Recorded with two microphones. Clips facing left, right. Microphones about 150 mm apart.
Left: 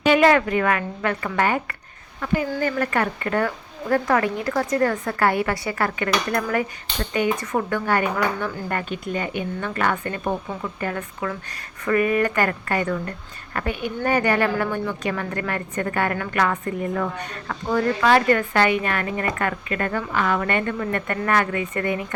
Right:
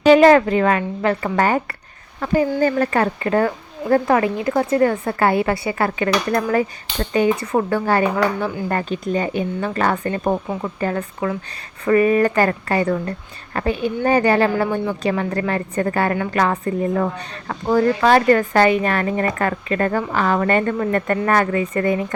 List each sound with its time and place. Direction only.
0.0 s speech: 35° right (ahead or behind)